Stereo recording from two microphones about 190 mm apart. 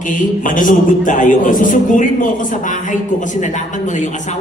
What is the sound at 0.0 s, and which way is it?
A man's voice, 45° left (ahead or behind).